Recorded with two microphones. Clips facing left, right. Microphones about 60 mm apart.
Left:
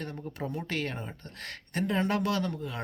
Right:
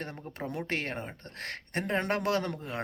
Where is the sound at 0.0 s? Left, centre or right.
Right.